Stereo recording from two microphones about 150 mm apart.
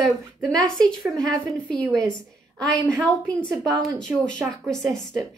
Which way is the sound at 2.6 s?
5° left (ahead or behind).